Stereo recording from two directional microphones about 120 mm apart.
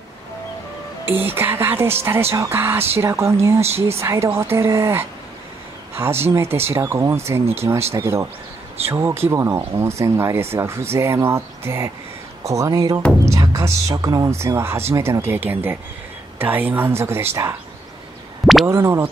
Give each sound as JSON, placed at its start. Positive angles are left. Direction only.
{"t": 1.0, "sound": "speech", "side_deg": -15}
{"t": 3.6, "sound": "speech", "side_deg": -60}
{"t": 4.0, "sound": "speech", "side_deg": -20}
{"t": 6.2, "sound": "speech", "side_deg": -20}
{"t": 18.7, "sound": "speech", "side_deg": -20}